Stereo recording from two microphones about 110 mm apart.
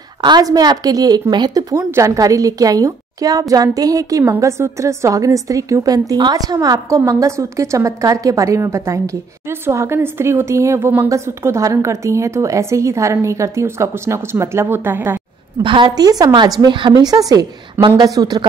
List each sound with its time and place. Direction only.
0.2 s a woman's voice: 40° right (ahead or behind)
1.8 s a woman's voice: 25° right (ahead or behind)
15.6 s a woman's voice: 50° right (ahead or behind)
15.9 s a woman's voice: 35° right (ahead or behind)